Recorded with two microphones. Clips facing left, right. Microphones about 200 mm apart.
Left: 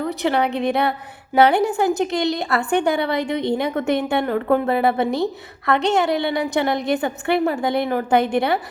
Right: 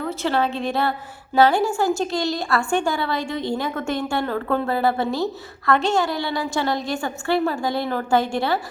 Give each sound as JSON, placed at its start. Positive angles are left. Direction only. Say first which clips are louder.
{"t": 0.0, "sound": "a woman's voice", "louder": "left 2 dB", "side_deg": 15}